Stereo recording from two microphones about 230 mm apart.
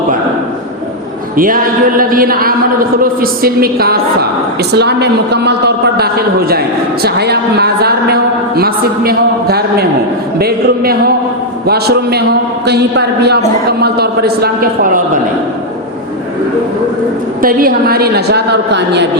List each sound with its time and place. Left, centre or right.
1.4 s a woman's voice: right
17.4 s a woman's voice: right